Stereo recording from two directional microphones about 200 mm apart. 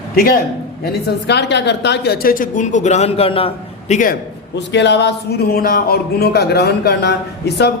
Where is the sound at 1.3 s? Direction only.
60° left (ahead or behind); by 4.1 s 35° left (ahead or behind).